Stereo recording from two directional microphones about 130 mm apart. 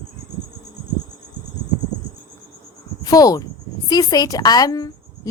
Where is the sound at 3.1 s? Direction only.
30° left (ahead or behind).